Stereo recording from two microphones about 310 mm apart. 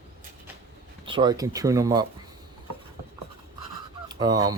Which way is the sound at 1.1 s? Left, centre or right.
Centre.